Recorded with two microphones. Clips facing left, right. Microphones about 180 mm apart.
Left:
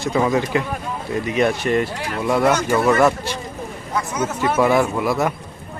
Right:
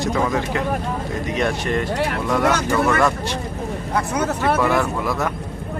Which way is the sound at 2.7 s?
20° left (ahead or behind).